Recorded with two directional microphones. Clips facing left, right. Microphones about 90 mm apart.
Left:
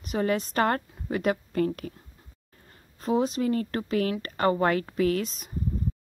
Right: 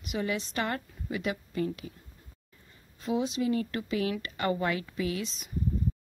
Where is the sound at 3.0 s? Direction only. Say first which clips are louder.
Left 4 dB; 40° left (ahead or behind).